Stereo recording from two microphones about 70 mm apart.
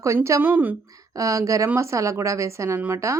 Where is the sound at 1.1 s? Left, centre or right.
Right.